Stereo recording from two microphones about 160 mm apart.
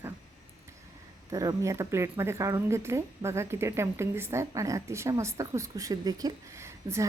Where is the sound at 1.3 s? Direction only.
20° right (ahead or behind).